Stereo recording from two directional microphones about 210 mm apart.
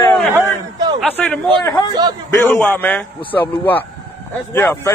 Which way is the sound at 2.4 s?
10° left (ahead or behind).